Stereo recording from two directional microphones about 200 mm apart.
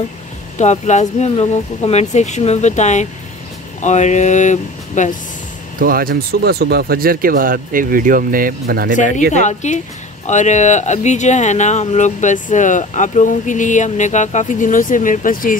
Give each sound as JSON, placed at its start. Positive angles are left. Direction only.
{"t": 0.6, "sound": "speech", "side_deg": 35}
{"t": 5.8, "sound": "speech", "side_deg": -45}
{"t": 8.9, "sound": "speech", "side_deg": 35}